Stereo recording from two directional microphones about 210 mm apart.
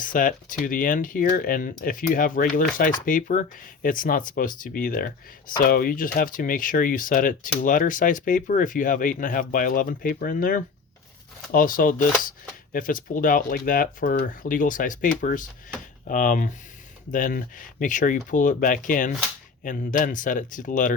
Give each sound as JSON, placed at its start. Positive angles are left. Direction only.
{"t": 0.0, "sound": "speech", "side_deg": 40}